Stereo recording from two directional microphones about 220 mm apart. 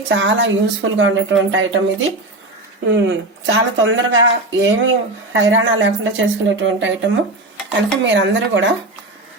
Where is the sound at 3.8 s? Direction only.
60° right (ahead or behind).